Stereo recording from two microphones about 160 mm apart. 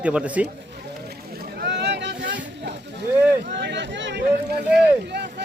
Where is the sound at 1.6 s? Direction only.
90° right.